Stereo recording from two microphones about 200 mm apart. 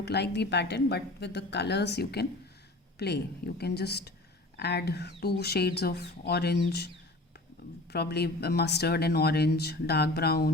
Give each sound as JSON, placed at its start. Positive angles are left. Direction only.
{"t": 0.0, "sound": "speech", "side_deg": 55}